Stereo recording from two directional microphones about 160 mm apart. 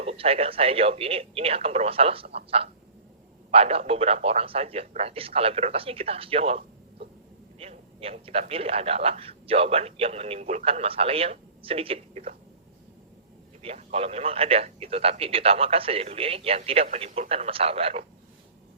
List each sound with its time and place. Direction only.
0.0 s a man's voice: 40° right (ahead or behind)
13.6 s a man's voice: 40° right (ahead or behind)